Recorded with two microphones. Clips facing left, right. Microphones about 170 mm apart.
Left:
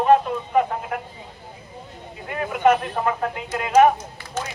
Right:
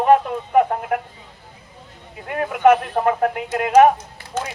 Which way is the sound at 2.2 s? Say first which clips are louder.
Right 3 dB; 55° right (ahead or behind).